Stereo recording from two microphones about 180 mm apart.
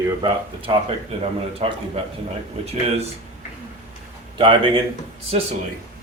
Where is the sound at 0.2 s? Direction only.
30° right (ahead or behind).